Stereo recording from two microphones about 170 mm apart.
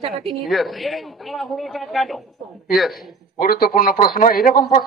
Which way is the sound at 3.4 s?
60° left (ahead or behind).